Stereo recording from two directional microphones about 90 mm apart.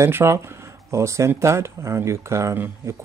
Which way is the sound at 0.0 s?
30° right (ahead or behind).